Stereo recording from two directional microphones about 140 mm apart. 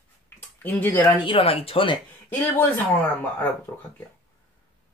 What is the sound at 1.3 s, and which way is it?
Speech, 40° left (ahead or behind).